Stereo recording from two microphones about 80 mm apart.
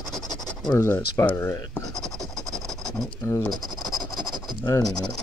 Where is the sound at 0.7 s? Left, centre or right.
Left.